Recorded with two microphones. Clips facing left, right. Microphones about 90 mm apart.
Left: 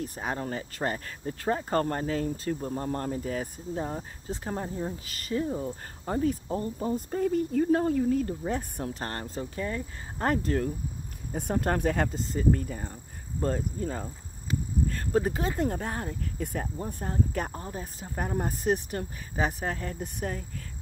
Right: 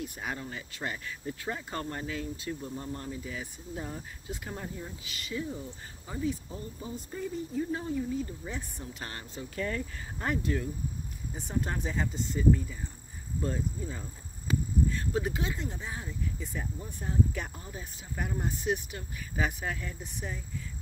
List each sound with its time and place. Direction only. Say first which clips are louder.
0.0 s speech: left 5 dB; 35° left (ahead or behind)
9.6 s speech: even; 25° left (ahead or behind)
10.1 s speech: left 5 dB; 45° left (ahead or behind); by 12.1 s 65° left (ahead or behind)
12.1 s speech: left 2 dB; 40° left (ahead or behind)
12.5 s speech: left 4 dB; 55° left (ahead or behind)